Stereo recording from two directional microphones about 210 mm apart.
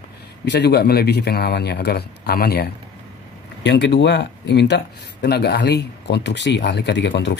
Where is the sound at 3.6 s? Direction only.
55° left (ahead or behind).